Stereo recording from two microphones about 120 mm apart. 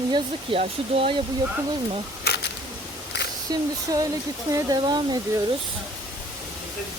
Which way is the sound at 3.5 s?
30° right (ahead or behind).